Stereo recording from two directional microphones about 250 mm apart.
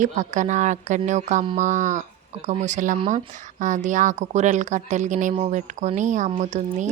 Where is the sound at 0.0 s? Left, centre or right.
Right.